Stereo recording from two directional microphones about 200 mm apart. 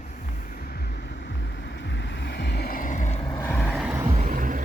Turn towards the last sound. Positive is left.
turn(degrees=-40)  # may be behind; listen again after turning